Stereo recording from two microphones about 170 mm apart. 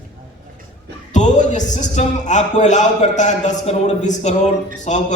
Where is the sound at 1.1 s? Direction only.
45° left (ahead or behind).